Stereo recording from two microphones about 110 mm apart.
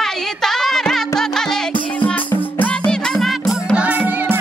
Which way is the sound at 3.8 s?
15° right (ahead or behind).